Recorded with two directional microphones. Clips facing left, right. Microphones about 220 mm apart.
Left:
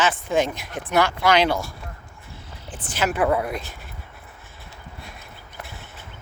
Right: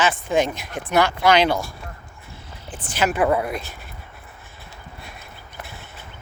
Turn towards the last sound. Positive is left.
turn(degrees=-5)  # may be behind; listen again after turning